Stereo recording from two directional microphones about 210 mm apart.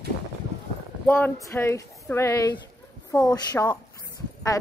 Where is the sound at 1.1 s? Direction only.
10° left (ahead or behind).